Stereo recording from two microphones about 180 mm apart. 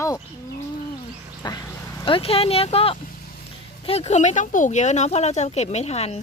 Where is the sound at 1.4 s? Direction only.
25° left (ahead or behind).